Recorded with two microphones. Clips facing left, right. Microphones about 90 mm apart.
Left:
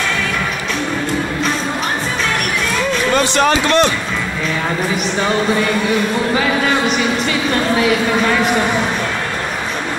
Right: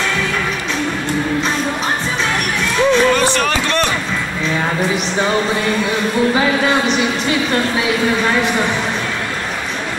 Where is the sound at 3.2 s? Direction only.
20° left (ahead or behind).